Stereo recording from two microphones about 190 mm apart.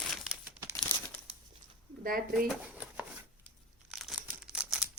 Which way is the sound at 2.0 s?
50° right (ahead or behind).